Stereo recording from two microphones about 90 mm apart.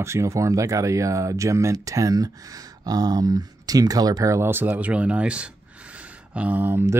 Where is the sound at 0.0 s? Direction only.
30° right (ahead or behind).